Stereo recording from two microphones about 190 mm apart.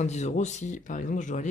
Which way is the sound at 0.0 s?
35° left (ahead or behind).